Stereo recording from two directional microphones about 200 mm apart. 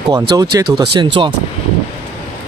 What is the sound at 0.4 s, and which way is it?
Speech, 20° right (ahead or behind).